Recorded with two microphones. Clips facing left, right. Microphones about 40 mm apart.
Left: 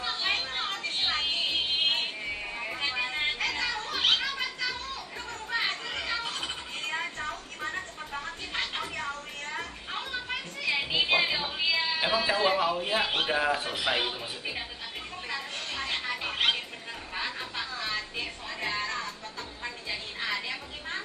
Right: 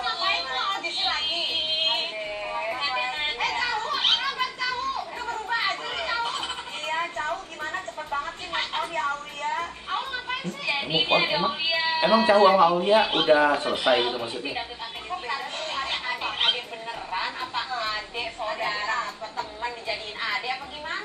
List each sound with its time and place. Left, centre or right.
0.2 s a sound: right
2.0 s music: centre
3.3 s children playing: right
5.5 s a sound: centre
11.4 s music: right
12.1 s speech: centre
15.0 s music: centre
17.7 s a sound: centre
18.6 s music: centre